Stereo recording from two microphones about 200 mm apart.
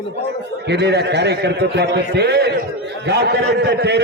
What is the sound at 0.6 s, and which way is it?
A man's voice, 60° right (ahead or behind).